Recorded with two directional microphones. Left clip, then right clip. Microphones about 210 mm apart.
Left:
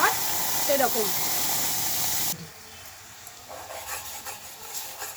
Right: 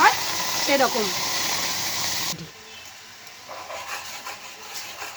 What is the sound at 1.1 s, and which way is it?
Hiss, centre (ahead or behind).